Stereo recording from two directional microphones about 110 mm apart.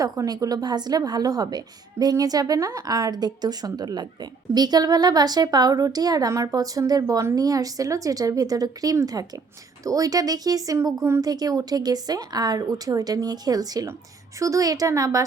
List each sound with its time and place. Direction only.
0.0 s a woman's voice: 30° right (ahead or behind)